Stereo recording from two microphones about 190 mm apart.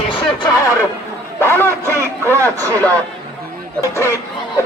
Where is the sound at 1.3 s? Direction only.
10° left (ahead or behind).